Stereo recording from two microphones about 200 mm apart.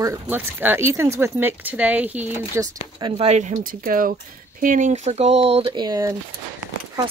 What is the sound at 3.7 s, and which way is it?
Speech, 45° right (ahead or behind).